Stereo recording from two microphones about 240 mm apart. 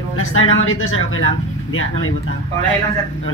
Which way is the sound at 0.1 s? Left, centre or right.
Left.